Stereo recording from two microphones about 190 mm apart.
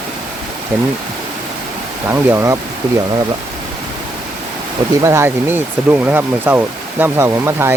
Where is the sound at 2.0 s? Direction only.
15° right (ahead or behind).